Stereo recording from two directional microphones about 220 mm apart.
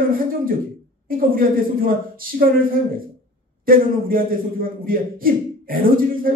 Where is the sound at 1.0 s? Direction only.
40° right (ahead or behind).